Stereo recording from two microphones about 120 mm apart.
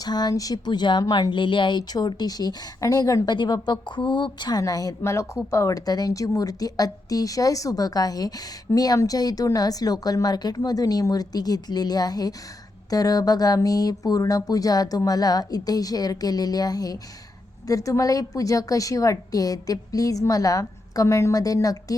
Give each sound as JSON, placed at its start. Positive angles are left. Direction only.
{"t": 0.0, "sound": "a woman's voice", "side_deg": 35}